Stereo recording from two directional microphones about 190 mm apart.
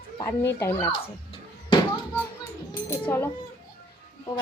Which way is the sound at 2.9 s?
10° left (ahead or behind).